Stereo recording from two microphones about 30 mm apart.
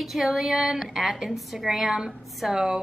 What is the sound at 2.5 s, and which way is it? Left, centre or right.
Speech, right.